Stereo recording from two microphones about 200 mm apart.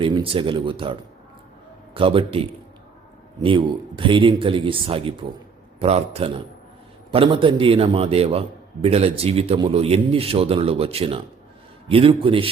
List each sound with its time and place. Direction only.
0.0 s a man's voice: 25° right (ahead or behind)